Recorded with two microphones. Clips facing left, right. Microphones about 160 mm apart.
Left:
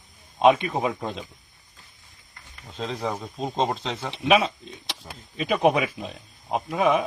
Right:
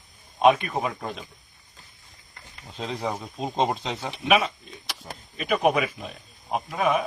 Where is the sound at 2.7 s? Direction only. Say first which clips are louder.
Left 1 dB; centre (ahead or behind).